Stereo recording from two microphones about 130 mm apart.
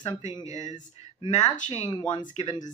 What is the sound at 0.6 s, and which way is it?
Speech, 65° left (ahead or behind).